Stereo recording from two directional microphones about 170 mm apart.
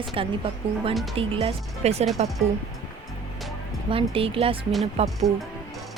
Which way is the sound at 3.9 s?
35° right (ahead or behind).